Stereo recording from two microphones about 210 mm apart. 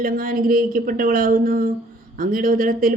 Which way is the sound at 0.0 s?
40° right (ahead or behind).